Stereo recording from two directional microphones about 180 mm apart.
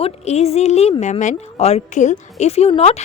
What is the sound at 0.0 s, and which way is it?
A woman's voice, 35° left (ahead or behind).